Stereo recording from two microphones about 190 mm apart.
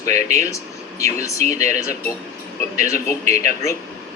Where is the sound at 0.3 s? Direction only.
15° left (ahead or behind).